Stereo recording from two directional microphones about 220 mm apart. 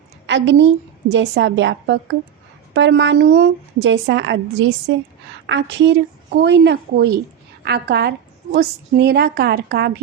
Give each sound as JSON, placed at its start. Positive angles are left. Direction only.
{"t": 0.3, "sound": "a woman's voice", "side_deg": -55}